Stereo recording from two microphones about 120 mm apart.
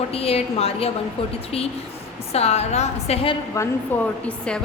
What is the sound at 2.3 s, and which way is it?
Speech, 60° left (ahead or behind).